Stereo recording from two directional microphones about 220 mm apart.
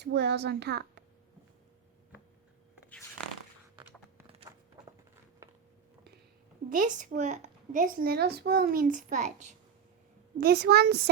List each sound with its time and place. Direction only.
0.0 s speech: 50° right (ahead or behind)
4.5 s a sound: 15° right (ahead or behind)
6.7 s a woman's voice: 35° right (ahead or behind)
10.4 s speech: 45° right (ahead or behind)